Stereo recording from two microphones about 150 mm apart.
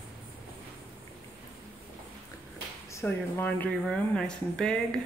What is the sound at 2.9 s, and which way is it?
Speech, 15° left (ahead or behind).